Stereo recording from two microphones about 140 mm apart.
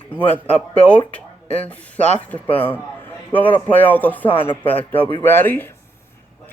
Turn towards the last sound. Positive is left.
turn(degrees=15)  # may be behind; listen again after turning